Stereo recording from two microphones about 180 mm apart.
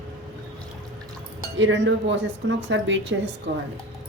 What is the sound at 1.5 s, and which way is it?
Speech, 85° right.